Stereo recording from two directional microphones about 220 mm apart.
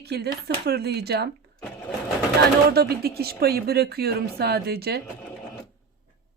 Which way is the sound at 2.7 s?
45° right (ahead or behind).